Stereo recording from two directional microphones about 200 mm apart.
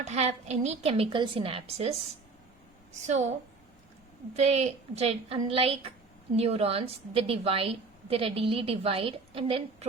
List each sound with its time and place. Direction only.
0.0 s a woman's voice: 35° right (ahead or behind)
4.4 s a woman's voice: 35° right (ahead or behind)